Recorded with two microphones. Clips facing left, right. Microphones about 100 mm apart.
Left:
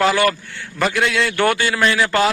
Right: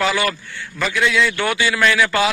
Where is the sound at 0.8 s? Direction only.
60° left (ahead or behind).